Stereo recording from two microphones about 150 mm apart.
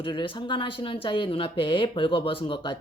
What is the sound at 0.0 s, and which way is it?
Speech, 35° left (ahead or behind).